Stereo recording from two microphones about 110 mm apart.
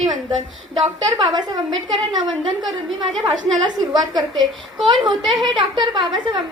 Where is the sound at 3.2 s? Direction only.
45° right (ahead or behind).